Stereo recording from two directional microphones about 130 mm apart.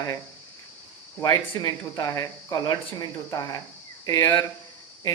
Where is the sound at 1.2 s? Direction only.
25° left (ahead or behind).